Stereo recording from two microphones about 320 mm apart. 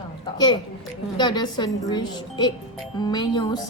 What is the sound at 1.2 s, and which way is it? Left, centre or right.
Speech, centre.